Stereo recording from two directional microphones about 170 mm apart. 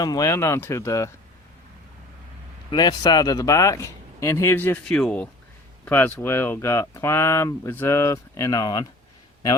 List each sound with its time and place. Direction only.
0.0 s speech: 20° left (ahead or behind)
2.6 s speech: 25° left (ahead or behind)